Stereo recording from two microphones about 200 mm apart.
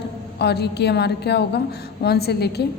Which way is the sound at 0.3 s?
55° left (ahead or behind).